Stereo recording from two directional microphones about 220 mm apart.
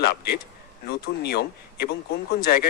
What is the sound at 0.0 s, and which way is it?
A man's voice, 45° left (ahead or behind).